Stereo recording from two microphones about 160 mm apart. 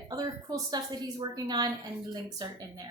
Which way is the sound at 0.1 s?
20° right (ahead or behind).